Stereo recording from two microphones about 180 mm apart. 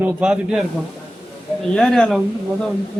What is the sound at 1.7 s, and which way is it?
Speech, 5° left (ahead or behind).